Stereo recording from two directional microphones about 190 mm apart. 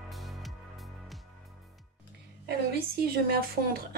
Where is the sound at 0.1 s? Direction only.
Centre (ahead or behind).